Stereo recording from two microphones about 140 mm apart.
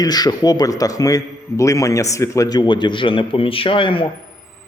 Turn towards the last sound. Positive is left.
turn(degrees=40)  # may be behind; listen again after turning